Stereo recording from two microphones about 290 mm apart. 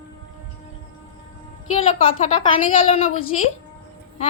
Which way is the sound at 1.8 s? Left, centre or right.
Left.